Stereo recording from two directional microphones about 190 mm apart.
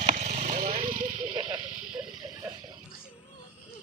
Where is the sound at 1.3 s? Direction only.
25° right (ahead or behind).